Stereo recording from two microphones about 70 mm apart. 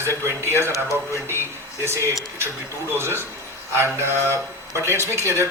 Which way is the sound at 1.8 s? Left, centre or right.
Right.